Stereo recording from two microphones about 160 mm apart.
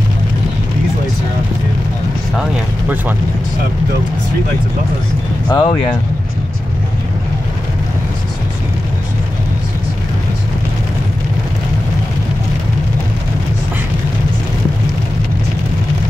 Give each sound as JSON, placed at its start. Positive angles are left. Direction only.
{"t": 5.5, "sound": "speech", "side_deg": 25}